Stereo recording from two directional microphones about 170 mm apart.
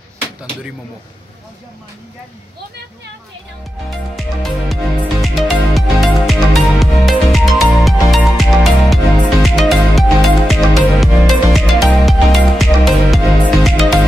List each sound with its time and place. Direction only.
3.9 s music: centre (ahead or behind)